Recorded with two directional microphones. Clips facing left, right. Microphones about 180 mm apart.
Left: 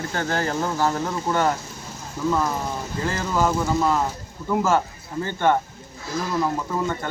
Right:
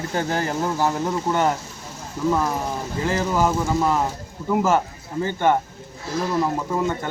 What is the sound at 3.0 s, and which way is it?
A man's voice, 15° right (ahead or behind).